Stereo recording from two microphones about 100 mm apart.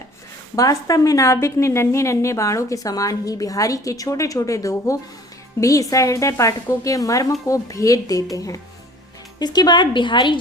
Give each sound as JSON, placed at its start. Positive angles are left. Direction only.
{"t": 0.5, "sound": "a woman's voice", "side_deg": 35}